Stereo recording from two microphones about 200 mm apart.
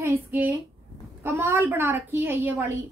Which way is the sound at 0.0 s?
10° right (ahead or behind).